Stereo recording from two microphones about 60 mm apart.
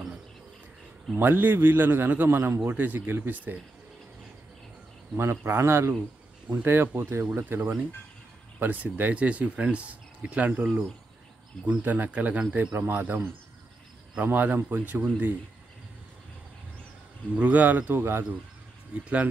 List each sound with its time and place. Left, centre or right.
1.1 s a man's voice: right
5.1 s a man's voice: right
12.7 s a man's voice: right
17.4 s a man's voice: right
18.9 s speech: right